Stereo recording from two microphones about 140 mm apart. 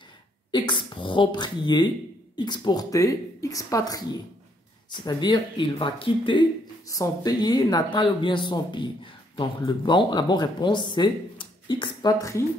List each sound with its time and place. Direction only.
0.5 s a woman's voice: 35° left (ahead or behind)
6.9 s speech: 25° left (ahead or behind)